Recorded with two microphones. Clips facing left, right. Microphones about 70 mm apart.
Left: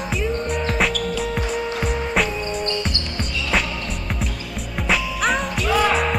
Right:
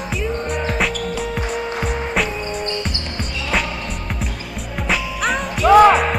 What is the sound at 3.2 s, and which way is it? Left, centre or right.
Basketball bounce, centre.